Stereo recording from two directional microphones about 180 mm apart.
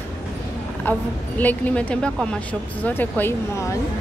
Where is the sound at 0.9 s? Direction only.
10° left (ahead or behind).